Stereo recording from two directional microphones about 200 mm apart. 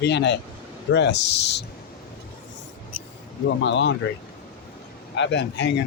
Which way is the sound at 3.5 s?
65° left (ahead or behind).